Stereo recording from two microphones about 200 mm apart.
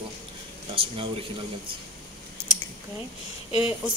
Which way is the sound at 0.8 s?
25° right (ahead or behind).